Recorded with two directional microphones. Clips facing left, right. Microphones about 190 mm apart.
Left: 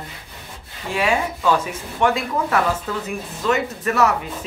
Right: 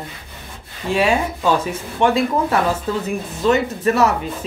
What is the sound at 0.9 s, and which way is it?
Speech, 30° right (ahead or behind).